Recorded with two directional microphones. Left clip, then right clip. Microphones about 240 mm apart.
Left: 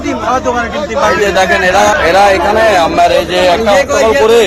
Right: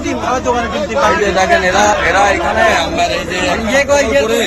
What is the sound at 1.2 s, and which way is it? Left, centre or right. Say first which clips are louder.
Speech: left 2 dB; centre.